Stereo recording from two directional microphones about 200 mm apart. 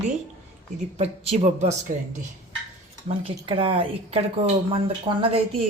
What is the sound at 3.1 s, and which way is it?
Speech, 25° right (ahead or behind).